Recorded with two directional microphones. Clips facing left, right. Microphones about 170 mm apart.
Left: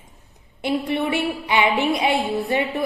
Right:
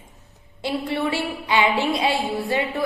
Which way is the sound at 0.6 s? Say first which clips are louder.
Left 2 dB; 20° left (ahead or behind).